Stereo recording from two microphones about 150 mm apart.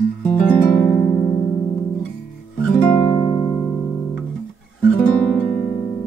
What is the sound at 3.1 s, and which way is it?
Music, 30° left (ahead or behind).